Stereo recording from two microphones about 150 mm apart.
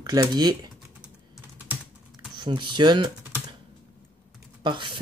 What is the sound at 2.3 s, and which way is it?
Speech, 30° right (ahead or behind).